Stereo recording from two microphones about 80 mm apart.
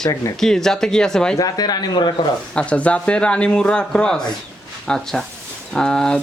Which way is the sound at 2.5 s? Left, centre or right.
Centre.